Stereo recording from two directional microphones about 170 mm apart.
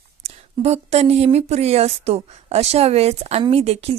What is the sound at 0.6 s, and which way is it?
A woman's voice, 40° right (ahead or behind).